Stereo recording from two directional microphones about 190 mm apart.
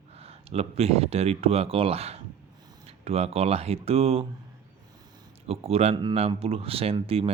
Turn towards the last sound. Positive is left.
turn(degrees=-30)  # may be behind; listen again after turning